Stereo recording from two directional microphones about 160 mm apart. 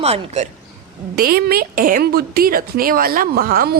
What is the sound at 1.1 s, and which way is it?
A woman's voice, 70° right (ahead or behind).